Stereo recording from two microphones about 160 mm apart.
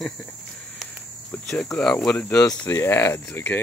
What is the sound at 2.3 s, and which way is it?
Speech, 20° left (ahead or behind).